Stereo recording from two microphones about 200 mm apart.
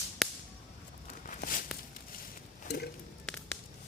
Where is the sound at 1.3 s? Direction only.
45° left (ahead or behind).